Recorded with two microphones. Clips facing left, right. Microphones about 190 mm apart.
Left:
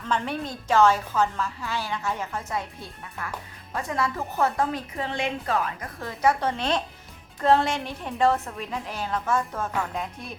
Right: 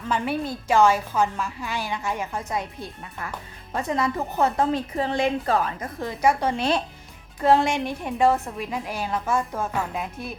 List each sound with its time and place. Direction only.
0.1 s a woman's voice: 10° right (ahead or behind)
3.7 s a woman's voice: 20° right (ahead or behind)
6.0 s a woman's voice: 15° right (ahead or behind)